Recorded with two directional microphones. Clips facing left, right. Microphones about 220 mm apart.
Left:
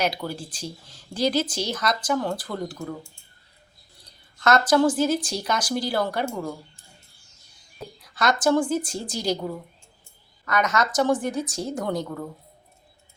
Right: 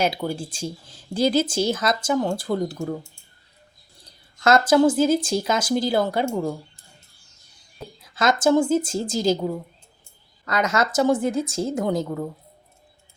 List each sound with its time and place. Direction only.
0.0 s speech: 25° right (ahead or behind)
4.4 s speech: 25° right (ahead or behind)
8.0 s speech: 25° right (ahead or behind)
10.4 s speech: 30° right (ahead or behind)